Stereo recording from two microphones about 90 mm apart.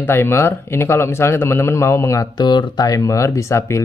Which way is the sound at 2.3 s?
55° left (ahead or behind).